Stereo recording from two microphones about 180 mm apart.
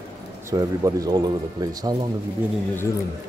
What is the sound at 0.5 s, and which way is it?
Speech, 20° right (ahead or behind).